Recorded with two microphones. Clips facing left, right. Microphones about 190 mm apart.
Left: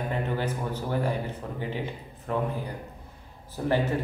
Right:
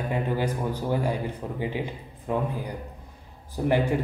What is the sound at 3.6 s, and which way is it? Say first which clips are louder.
Speech: right 3 dB; 15° right (ahead or behind).